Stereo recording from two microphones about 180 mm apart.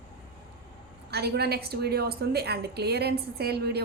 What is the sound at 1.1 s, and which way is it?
A woman's voice, 65° right (ahead or behind).